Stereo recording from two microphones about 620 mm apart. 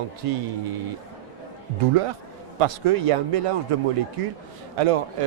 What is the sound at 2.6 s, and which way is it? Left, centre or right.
Speech, right.